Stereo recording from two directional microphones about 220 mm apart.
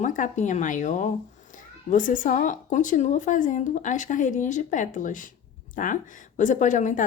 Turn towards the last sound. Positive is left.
turn(degrees=35)  # may be behind; listen again after turning